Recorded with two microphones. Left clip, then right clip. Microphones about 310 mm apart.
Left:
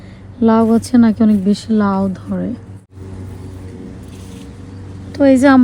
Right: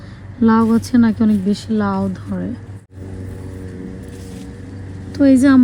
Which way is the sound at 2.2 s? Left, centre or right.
Left.